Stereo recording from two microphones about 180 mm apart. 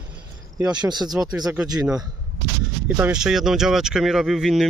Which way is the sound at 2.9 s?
5° right (ahead or behind).